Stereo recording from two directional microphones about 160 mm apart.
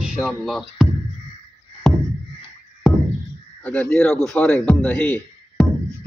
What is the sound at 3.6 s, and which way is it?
Speech, 10° left (ahead or behind).